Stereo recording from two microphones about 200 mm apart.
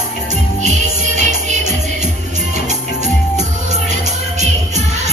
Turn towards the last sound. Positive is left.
turn(degrees=-35)  # may be behind; listen again after turning